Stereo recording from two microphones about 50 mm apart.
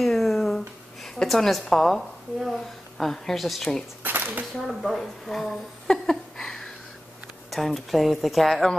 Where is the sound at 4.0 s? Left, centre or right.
Right.